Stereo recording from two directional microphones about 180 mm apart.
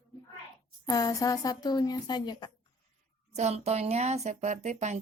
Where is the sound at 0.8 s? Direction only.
20° left (ahead or behind).